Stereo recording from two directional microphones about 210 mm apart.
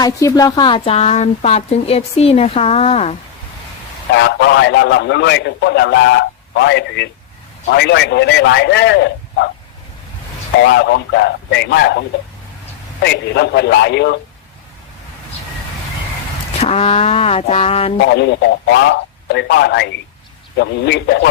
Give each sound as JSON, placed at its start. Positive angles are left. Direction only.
{"t": 0.0, "sound": "a woman's voice", "side_deg": 15}
{"t": 4.1, "sound": "a man's voice", "side_deg": 55}
{"t": 10.8, "sound": "a man's voice", "side_deg": 55}
{"t": 16.6, "sound": "a woman's voice", "side_deg": 30}
{"t": 18.1, "sound": "a man's voice", "side_deg": 55}